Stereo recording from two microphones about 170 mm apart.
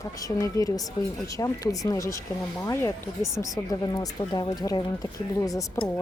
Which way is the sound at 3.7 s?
20° left (ahead or behind).